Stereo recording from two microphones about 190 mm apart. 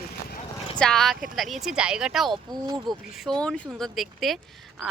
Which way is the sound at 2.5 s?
20° right (ahead or behind).